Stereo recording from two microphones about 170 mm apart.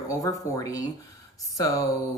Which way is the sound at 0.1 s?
20° left (ahead or behind).